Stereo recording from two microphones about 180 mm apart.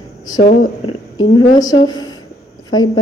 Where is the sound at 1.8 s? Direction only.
20° left (ahead or behind).